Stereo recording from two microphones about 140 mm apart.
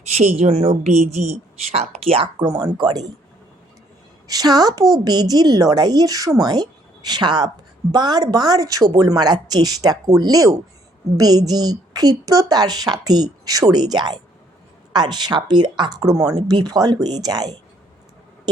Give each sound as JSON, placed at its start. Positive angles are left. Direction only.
{"t": 0.1, "sound": "a woman's voice", "side_deg": -50}
{"t": 2.0, "sound": "speech", "side_deg": -40}
{"t": 4.3, "sound": "a woman's voice", "side_deg": -30}